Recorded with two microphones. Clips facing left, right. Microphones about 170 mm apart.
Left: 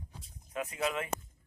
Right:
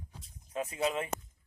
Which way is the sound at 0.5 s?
30° right (ahead or behind).